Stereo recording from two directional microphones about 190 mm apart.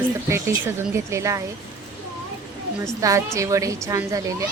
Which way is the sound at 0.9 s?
15° right (ahead or behind).